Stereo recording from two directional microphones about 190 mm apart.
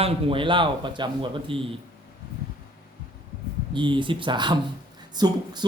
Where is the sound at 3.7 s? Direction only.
25° right (ahead or behind).